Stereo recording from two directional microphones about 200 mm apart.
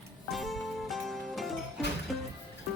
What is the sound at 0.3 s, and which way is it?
Music, centre (ahead or behind).